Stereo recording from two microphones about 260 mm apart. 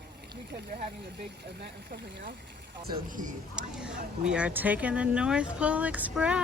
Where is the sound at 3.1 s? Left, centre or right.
Right.